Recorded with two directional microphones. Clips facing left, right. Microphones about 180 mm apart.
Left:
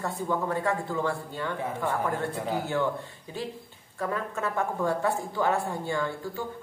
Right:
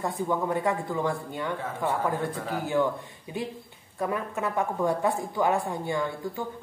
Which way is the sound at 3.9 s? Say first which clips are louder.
Right 2 dB; 15° right (ahead or behind).